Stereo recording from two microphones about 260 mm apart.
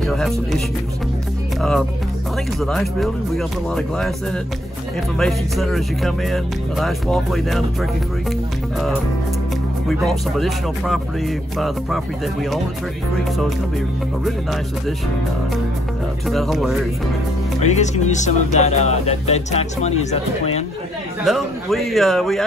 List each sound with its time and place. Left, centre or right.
0.0 s speech: centre
1.6 s speech: centre
5.1 s speech: centre
10.0 s speech: centre
14.2 s speech: centre
16.3 s speech: centre
17.6 s speech: left
21.2 s speech: centre